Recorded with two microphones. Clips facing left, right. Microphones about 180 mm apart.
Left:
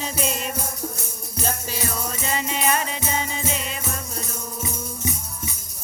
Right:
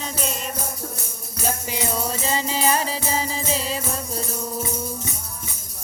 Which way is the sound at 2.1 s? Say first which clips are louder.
Right 2 dB; 30° right (ahead or behind).